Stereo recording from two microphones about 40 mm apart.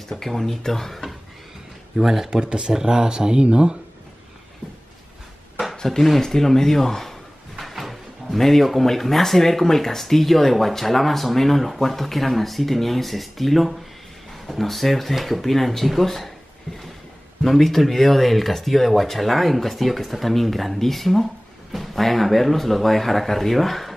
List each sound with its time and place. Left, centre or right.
0.1 s speech: centre
2.0 s speech: centre
2.4 s speech: centre
5.9 s speech: centre
16.7 s speech: centre